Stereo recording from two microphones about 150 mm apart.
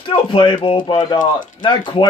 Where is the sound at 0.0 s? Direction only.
35° left (ahead or behind).